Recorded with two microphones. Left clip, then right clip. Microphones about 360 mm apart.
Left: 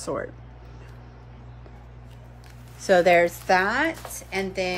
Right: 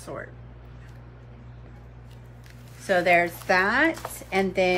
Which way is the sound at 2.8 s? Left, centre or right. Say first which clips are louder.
Left 3 dB; centre.